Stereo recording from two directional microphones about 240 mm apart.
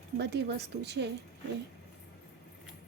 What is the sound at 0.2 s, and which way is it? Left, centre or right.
Speech, right.